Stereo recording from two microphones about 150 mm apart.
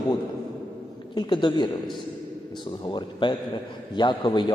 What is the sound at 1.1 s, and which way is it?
A man's voice, 30° left (ahead or behind).